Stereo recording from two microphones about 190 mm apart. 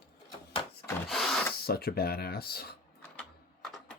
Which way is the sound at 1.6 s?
55° left (ahead or behind).